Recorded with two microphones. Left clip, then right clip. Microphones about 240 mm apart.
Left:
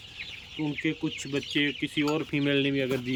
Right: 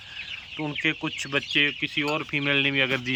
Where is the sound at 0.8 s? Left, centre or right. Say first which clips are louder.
Right 7 dB; centre.